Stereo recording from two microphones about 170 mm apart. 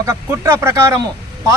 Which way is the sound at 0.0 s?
15° right (ahead or behind).